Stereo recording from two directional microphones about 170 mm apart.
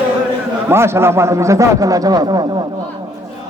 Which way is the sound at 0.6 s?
15° right (ahead or behind).